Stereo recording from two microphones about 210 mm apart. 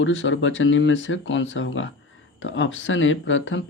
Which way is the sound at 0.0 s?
65° left (ahead or behind).